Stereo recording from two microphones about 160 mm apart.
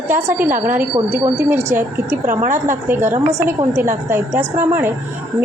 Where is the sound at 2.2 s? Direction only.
55° right (ahead or behind).